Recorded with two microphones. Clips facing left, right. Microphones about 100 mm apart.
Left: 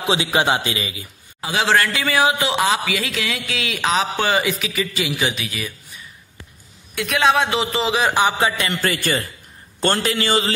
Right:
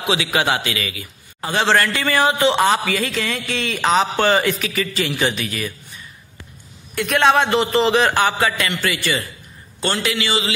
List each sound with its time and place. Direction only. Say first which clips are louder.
0.0 s a man's voice: left 1 dB; 25° left (ahead or behind)
1.4 s a man's voice: right 1 dB; 5° left (ahead or behind)
7.0 s a man's voice: right 2 dB; centre (ahead or behind)
8.1 s a man's voice: even; 15° left (ahead or behind)
8.8 s a man's voice: left 1 dB; 40° left (ahead or behind)